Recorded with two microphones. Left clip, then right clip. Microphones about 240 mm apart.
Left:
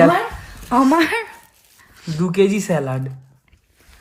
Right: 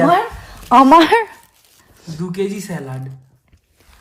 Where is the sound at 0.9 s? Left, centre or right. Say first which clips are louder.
Right 8 dB; right.